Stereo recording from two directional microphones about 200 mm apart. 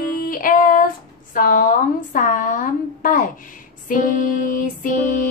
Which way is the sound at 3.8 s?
45° left (ahead or behind).